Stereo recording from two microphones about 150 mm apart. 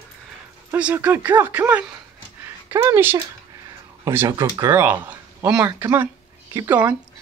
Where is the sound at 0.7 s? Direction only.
10° right (ahead or behind).